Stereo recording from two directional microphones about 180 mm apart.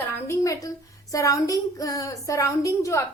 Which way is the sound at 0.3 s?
20° left (ahead or behind).